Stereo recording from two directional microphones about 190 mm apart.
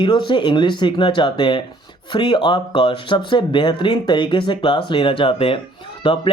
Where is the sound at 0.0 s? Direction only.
25° left (ahead or behind).